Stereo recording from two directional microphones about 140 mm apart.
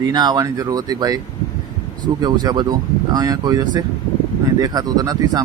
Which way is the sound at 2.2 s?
30° right (ahead or behind).